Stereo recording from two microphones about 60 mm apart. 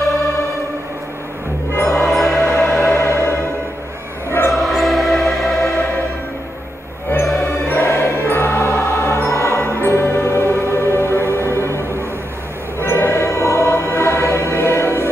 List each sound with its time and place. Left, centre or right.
1.9 s music: centre
2.4 s music: left
4.5 s music: centre
7.2 s music: left
12.8 s music: left